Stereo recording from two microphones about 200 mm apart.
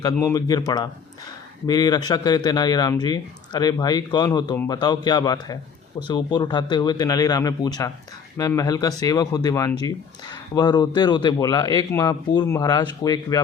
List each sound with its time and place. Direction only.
0.0 s speech: 15° left (ahead or behind)